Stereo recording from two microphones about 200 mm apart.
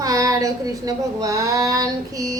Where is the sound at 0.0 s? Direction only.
15° right (ahead or behind).